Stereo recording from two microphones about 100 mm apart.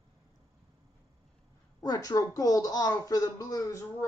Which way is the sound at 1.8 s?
40° left (ahead or behind).